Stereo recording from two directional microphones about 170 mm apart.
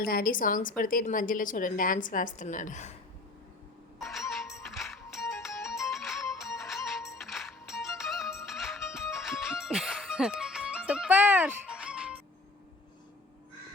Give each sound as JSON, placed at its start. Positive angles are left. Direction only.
{"t": 0.0, "sound": "a woman's voice", "side_deg": 60}
{"t": 3.9, "sound": "music", "side_deg": 0}